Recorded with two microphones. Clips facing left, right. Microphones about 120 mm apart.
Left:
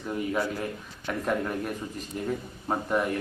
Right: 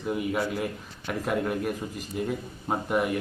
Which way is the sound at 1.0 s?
5° right (ahead or behind).